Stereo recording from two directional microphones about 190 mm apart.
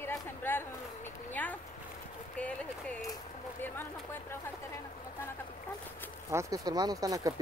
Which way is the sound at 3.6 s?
10° left (ahead or behind).